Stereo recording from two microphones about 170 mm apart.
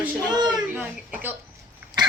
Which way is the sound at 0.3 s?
25° right (ahead or behind).